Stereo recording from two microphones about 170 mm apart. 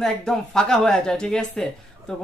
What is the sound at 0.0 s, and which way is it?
Speech, centre (ahead or behind).